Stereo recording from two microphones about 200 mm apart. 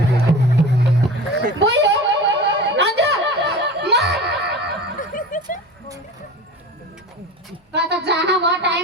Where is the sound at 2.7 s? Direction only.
60° right (ahead or behind).